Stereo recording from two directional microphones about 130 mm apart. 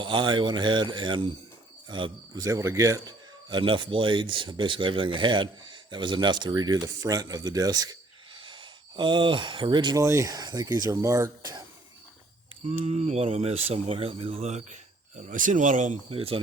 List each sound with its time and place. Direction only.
0.0 s speech: 40° right (ahead or behind)
2.4 s speech: 25° right (ahead or behind)
3.5 s speech: 40° right (ahead or behind)
10.0 s speech: 25° right (ahead or behind)
12.6 s speech: 50° right (ahead or behind)
15.2 s speech: 85° right
16.0 s speech: 45° right (ahead or behind)